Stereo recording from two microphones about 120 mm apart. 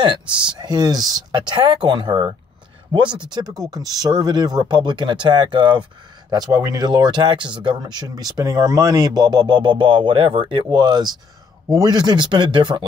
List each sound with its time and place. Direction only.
0.5 s speech: 35° right (ahead or behind)
6.3 s speech: 30° right (ahead or behind)